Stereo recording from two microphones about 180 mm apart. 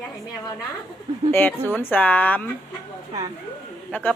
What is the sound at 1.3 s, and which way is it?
Speech, 10° left (ahead or behind).